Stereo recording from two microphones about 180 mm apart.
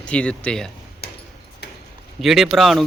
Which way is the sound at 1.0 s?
60° left (ahead or behind).